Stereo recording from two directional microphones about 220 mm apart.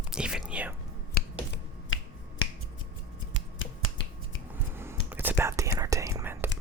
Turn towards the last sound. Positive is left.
turn(degrees=-10)  # may be behind; listen again after turning